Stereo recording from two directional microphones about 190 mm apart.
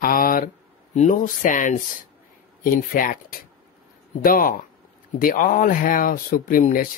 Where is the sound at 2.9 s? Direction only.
50° left (ahead or behind).